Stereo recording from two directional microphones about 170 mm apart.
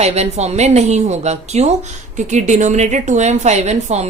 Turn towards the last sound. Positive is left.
turn(degrees=-40)  # may be behind; listen again after turning